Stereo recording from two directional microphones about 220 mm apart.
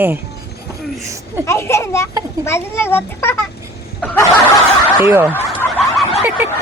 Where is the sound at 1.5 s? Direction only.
10° left (ahead or behind).